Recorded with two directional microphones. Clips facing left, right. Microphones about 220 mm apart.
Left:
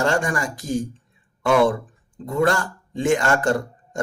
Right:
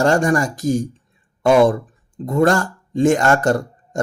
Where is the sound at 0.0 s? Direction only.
40° right (ahead or behind).